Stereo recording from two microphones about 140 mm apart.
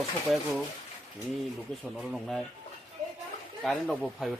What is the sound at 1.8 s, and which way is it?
Speech, 5° right (ahead or behind).